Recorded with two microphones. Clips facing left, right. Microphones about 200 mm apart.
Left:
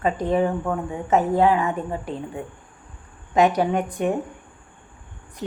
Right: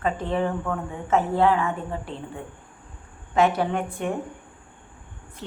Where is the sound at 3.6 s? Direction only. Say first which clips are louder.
Left 4 dB; 15° left (ahead or behind).